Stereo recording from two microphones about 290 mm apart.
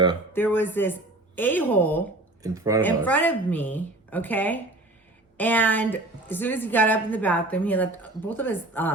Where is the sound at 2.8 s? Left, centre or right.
Centre.